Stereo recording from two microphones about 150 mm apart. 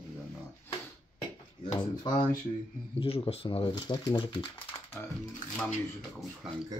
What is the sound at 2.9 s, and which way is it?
Speech, 40° left (ahead or behind).